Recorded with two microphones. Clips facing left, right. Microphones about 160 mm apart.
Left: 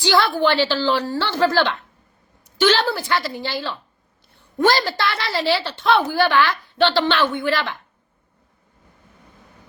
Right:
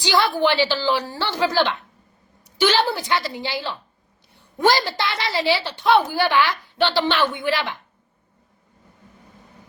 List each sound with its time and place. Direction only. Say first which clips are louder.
0.0 s a woman's voice: left 1 dB; 15° right (ahead or behind)